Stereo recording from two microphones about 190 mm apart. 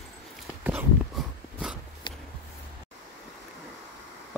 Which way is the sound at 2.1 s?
25° left (ahead or behind).